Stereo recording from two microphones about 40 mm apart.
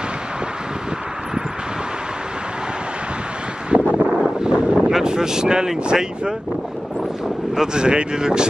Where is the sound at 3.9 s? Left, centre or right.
Centre.